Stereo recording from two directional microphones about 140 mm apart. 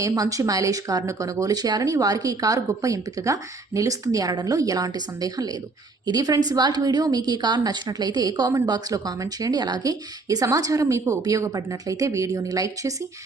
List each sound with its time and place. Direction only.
0.0 s speech: 25° right (ahead or behind)